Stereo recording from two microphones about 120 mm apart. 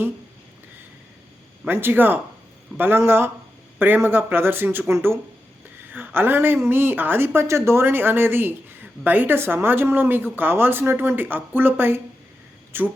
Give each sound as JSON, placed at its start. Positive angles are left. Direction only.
{"t": 1.6, "sound": "a man's voice", "side_deg": -15}